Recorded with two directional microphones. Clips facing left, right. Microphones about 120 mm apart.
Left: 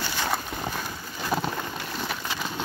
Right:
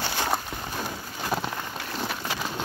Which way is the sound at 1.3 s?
5° right (ahead or behind).